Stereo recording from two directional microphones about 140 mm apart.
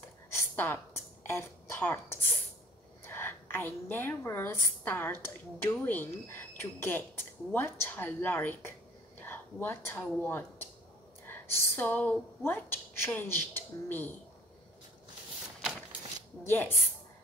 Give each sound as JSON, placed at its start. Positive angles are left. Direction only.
{"t": 0.6, "sound": "speech", "side_deg": 15}
{"t": 3.0, "sound": "a woman's voice", "side_deg": 15}
{"t": 15.6, "sound": "shuffling cards", "side_deg": -10}
{"t": 16.4, "sound": "a woman's voice", "side_deg": 15}